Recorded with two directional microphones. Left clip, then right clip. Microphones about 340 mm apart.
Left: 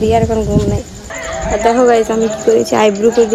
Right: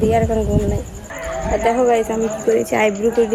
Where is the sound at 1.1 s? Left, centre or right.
Left.